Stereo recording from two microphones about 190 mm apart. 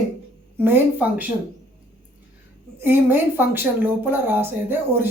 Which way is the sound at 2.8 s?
10° right (ahead or behind).